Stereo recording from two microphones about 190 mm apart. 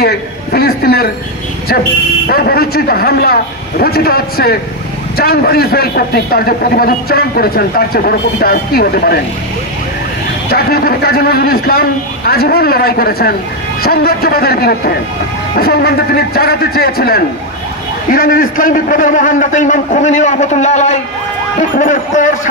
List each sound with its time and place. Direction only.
0.0 s speech: 55° left (ahead or behind)
2.2 s a man's voice: 55° left (ahead or behind)
10.5 s a man's voice: 50° left (ahead or behind)